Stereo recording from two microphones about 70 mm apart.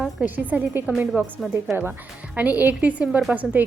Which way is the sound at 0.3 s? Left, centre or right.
Right.